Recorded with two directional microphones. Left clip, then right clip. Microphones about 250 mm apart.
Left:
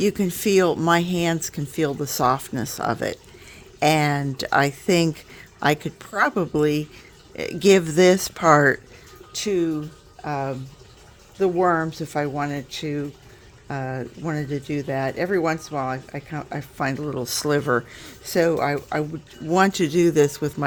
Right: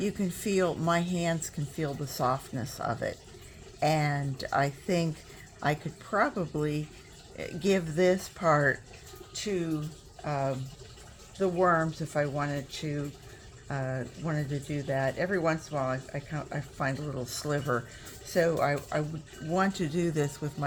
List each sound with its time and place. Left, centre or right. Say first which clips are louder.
0.0 s speech: left 11 dB; left